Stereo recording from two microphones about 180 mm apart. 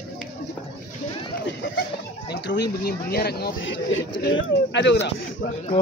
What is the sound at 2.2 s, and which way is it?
Speech, 65° left (ahead or behind).